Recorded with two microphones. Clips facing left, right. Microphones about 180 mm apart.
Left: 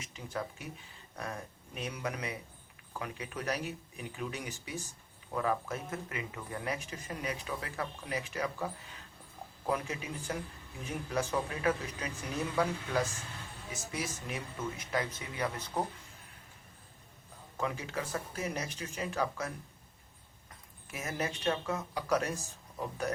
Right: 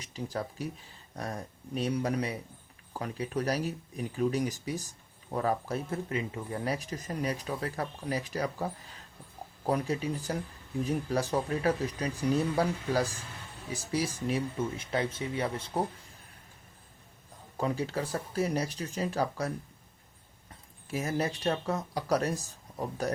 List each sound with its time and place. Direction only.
0.0 s speech: 35° right (ahead or behind)
17.6 s speech: 35° right (ahead or behind)
20.9 s speech: 35° right (ahead or behind)